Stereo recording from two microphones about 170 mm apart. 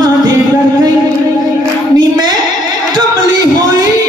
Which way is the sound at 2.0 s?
25° right (ahead or behind).